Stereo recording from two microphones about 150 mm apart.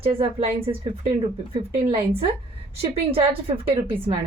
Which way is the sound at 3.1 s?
40° right (ahead or behind).